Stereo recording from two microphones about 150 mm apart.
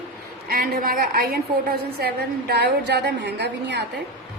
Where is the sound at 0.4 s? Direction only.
80° right.